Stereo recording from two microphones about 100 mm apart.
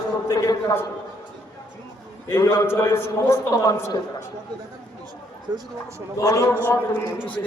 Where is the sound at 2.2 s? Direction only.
25° left (ahead or behind).